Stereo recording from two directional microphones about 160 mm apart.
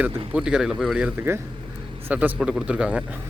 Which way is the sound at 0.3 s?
5° right (ahead or behind).